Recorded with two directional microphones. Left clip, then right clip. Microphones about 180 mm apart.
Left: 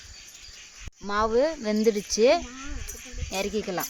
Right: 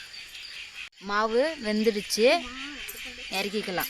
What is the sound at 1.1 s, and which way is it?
Speech, 35° left (ahead or behind).